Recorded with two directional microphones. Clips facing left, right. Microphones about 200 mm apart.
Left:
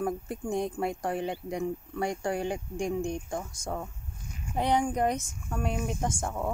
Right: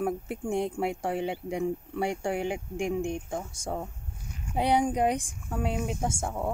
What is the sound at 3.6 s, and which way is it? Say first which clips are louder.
Speech: right 1 dB; 15° right (ahead or behind).